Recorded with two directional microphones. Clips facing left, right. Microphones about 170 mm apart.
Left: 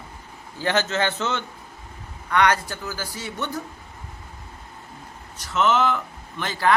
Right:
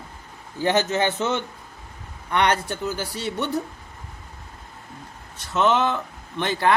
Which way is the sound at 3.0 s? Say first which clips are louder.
Right 3 dB; 65° right (ahead or behind).